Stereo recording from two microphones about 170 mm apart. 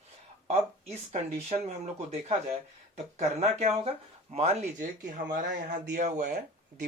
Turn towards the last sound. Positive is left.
turn(degrees=-45)  # may be behind; listen again after turning